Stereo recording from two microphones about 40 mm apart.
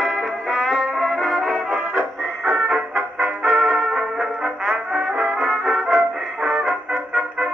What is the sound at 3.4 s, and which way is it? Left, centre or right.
Music, right.